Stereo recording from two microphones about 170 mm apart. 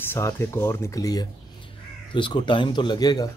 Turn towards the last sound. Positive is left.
turn(degrees=25)  # may be behind; listen again after turning